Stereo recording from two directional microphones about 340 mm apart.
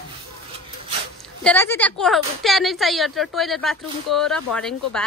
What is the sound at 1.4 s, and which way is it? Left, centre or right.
A woman's voice, centre.